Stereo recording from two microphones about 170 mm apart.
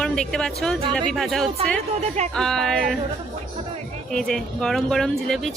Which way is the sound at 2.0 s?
40° right (ahead or behind).